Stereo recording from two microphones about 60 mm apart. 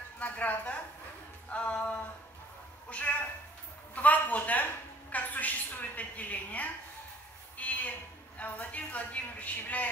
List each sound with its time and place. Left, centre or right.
0.2 s a woman's voice: left
7.5 s a sound: left
8.4 s a woman's voice: left